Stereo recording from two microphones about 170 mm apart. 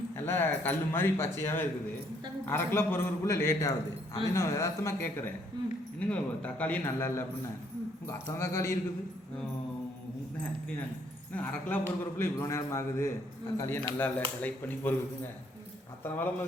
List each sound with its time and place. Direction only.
0.2 s a man's voice: 10° left (ahead or behind)
6.0 s a man's voice: 5° left (ahead or behind)
11.3 s a man's voice: 10° left (ahead or behind)